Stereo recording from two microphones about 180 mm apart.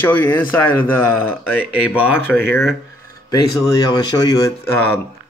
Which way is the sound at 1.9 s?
10° left (ahead or behind).